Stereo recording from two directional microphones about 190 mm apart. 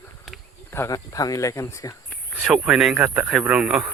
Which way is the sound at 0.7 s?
15° left (ahead or behind).